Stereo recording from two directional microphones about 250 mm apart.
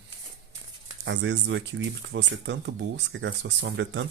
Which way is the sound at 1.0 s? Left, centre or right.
Right.